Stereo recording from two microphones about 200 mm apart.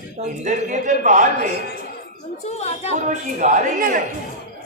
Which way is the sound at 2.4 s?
35° left (ahead or behind).